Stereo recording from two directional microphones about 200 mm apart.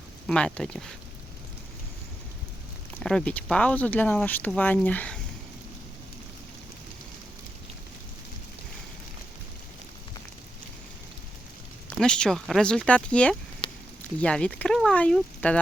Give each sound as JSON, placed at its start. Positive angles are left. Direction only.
{"t": 0.3, "sound": "speech", "side_deg": 5}
{"t": 3.0, "sound": "speech", "side_deg": 5}
{"t": 11.9, "sound": "speech", "side_deg": 5}
{"t": 13.6, "sound": "a sound", "side_deg": 30}
{"t": 14.2, "sound": "speech", "side_deg": 5}